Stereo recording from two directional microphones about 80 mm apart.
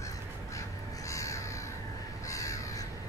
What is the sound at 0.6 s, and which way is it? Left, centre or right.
Crow, left.